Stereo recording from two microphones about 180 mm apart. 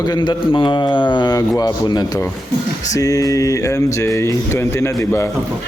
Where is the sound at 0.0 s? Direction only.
25° left (ahead or behind).